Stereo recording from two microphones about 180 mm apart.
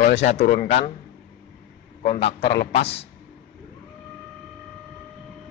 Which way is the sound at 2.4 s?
65° left (ahead or behind).